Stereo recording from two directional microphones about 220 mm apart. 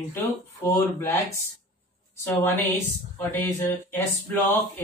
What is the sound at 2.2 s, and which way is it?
Speech, 10° left (ahead or behind).